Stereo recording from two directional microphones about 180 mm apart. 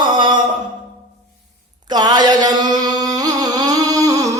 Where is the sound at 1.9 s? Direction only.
25° right (ahead or behind).